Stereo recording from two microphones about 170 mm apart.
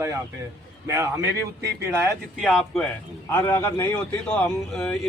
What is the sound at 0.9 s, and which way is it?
Speech, 20° right (ahead or behind).